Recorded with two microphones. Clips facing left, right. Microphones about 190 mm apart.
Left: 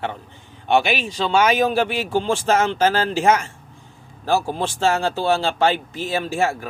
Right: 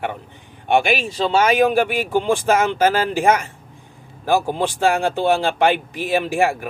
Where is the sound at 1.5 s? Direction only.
15° right (ahead or behind).